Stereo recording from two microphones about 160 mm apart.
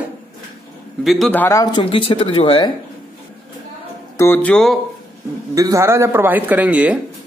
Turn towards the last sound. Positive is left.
turn(degrees=-10)  # may be behind; listen again after turning